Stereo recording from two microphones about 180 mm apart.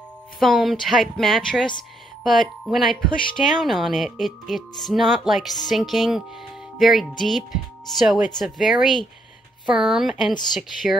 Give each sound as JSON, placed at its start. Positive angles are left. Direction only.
{"t": 0.4, "sound": "speech", "side_deg": 0}